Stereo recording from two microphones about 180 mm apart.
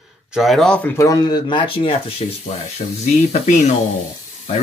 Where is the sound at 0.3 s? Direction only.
Centre (ahead or behind).